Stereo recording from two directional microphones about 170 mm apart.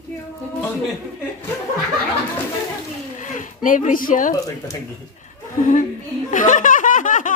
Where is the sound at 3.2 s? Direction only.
50° left (ahead or behind).